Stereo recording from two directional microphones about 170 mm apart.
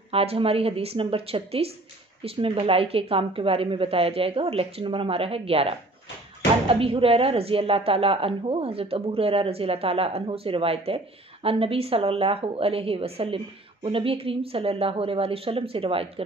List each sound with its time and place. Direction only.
0.1 s a woman's voice: 35° right (ahead or behind)